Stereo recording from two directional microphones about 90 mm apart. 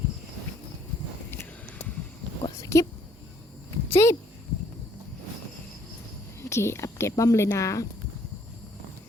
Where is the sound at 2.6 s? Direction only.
35° left (ahead or behind).